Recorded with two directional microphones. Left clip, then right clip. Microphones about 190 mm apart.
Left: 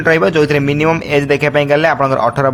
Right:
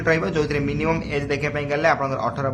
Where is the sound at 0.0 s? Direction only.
45° left (ahead or behind).